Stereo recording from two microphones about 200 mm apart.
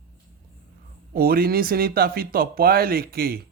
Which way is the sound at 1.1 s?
50° right (ahead or behind).